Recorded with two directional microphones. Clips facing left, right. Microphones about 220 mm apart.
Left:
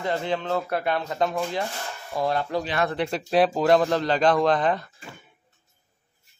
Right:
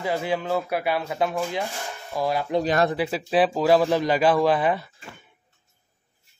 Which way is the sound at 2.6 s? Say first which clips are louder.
Right 5 dB; 45° right (ahead or behind).